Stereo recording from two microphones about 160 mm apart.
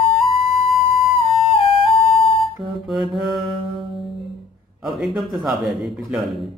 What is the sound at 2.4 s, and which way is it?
Speech, centre (ahead or behind).